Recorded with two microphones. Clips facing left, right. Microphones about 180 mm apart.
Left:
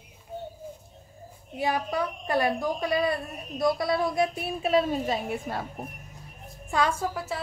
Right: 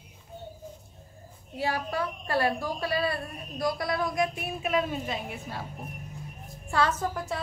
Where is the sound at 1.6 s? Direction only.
20° left (ahead or behind); by 5.6 s 45° left (ahead or behind).